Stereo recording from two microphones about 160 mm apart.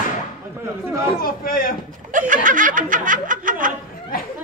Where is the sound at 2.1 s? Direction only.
55° right (ahead or behind).